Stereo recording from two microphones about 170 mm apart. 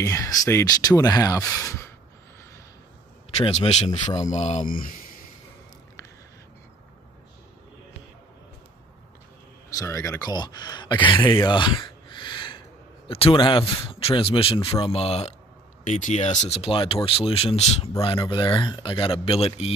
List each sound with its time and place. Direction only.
0.0 s speech: 20° left (ahead or behind)
3.3 s a man's voice: 40° left (ahead or behind)
9.8 s speech: 15° left (ahead or behind)
11.4 s a sound: 30° left (ahead or behind)
13.1 s a man's voice: 30° left (ahead or behind)